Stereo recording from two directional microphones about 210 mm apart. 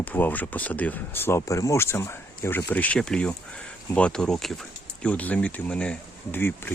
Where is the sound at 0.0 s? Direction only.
10° left (ahead or behind).